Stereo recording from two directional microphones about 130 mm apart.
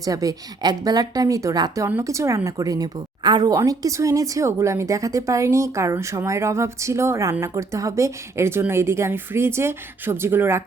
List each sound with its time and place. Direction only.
0.0 s a woman's voice: 30° right (ahead or behind)